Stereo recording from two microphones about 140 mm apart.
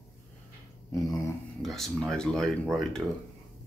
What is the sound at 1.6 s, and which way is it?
Speech, centre (ahead or behind).